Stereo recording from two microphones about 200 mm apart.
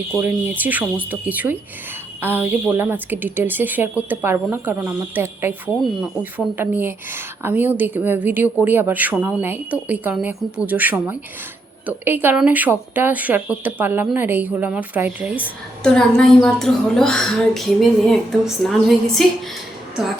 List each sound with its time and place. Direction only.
0.2 s a woman's voice: 10° right (ahead or behind)
15.4 s a woman's voice: 5° left (ahead or behind)